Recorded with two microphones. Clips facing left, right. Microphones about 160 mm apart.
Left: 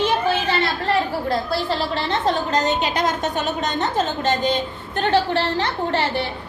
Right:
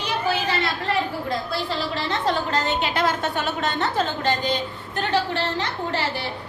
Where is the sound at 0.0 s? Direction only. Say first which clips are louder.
Left 4 dB; 25° left (ahead or behind).